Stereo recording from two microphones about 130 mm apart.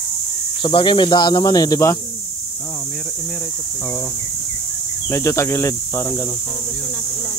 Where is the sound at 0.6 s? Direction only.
40° left (ahead or behind).